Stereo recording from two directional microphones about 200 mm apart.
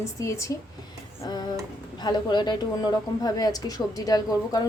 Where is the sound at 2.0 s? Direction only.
20° left (ahead or behind).